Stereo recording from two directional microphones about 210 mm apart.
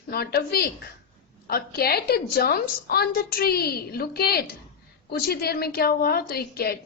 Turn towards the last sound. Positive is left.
turn(degrees=45)  # may be behind; listen again after turning